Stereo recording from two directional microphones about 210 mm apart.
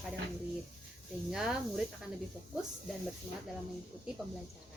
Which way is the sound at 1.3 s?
5° right (ahead or behind).